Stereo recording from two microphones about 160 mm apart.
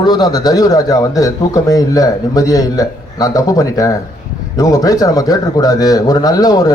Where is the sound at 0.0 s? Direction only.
25° left (ahead or behind).